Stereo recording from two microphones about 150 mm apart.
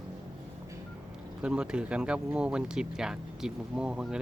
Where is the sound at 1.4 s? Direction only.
5° right (ahead or behind).